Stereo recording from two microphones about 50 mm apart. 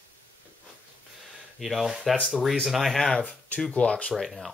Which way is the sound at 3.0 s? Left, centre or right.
Centre.